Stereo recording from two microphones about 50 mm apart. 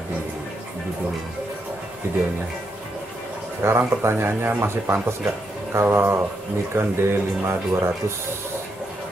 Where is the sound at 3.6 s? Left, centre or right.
Right.